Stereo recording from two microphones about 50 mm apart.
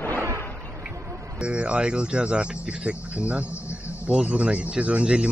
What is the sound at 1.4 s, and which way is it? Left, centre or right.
Speech, right.